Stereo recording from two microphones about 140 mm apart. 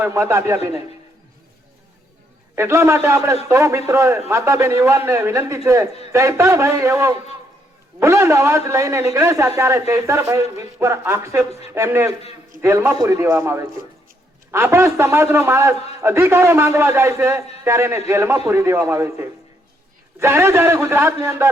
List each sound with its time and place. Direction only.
0.0 s a man's voice: 20° right (ahead or behind)
2.6 s a man's voice: 20° right (ahead or behind)